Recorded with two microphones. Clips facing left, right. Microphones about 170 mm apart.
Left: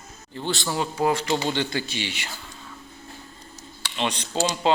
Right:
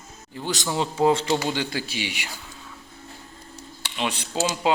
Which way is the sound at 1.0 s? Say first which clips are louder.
Right 3 dB; 25° right (ahead or behind).